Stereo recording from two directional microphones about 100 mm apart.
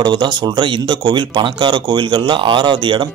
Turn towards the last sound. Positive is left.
turn(degrees=-50)  # may be behind; listen again after turning